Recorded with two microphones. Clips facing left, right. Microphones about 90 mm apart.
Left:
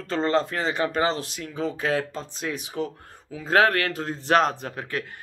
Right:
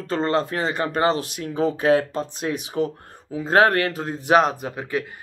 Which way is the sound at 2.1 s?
50° right (ahead or behind).